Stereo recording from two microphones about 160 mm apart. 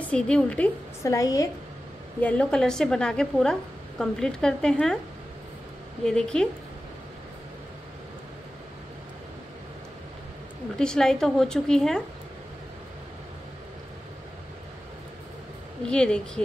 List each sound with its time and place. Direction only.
0.0 s a woman's voice: 5° left (ahead or behind)
1.0 s a woman's voice: 20° left (ahead or behind)
2.1 s a woman's voice: 10° left (ahead or behind)
6.0 s a woman's voice: 5° left (ahead or behind)
10.8 s a woman's voice: 5° left (ahead or behind)
15.9 s a woman's voice: 5° left (ahead or behind)